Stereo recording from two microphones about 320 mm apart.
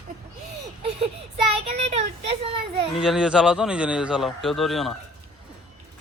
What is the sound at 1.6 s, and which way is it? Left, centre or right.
Speech, centre.